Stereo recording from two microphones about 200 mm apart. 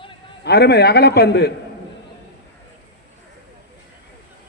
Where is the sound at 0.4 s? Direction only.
55° left (ahead or behind).